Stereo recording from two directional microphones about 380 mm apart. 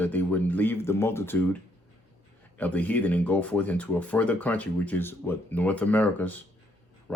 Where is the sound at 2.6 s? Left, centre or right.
Centre.